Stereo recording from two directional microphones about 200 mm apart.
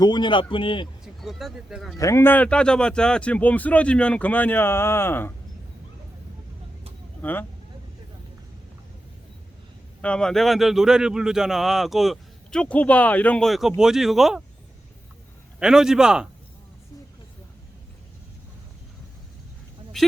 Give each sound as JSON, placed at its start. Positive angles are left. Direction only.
{"t": 0.0, "sound": "a man's voice", "side_deg": 20}
{"t": 1.0, "sound": "speech", "side_deg": 0}
{"t": 2.0, "sound": "speech", "side_deg": 15}
{"t": 7.2, "sound": "speech", "side_deg": 10}
{"t": 10.0, "sound": "a man's voice", "side_deg": 5}
{"t": 15.5, "sound": "a man's voice", "side_deg": -5}
{"t": 19.9, "sound": "speech", "side_deg": 0}